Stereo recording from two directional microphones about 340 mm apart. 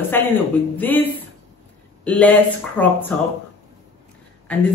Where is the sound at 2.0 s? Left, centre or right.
Centre.